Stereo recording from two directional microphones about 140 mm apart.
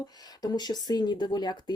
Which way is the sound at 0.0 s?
30° left (ahead or behind).